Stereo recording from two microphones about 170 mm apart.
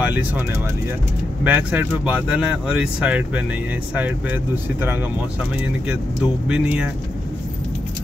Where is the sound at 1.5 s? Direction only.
10° right (ahead or behind).